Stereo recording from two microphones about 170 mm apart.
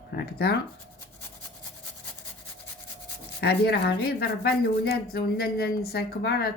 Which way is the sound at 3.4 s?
75° left (ahead or behind).